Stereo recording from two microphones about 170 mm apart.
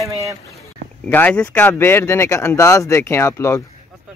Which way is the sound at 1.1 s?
10° left (ahead or behind).